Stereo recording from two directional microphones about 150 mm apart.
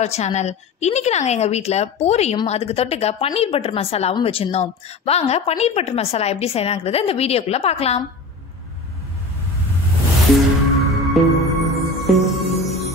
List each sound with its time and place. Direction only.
0.0 s a woman's voice: 50° left (ahead or behind)
10.9 s music: centre (ahead or behind)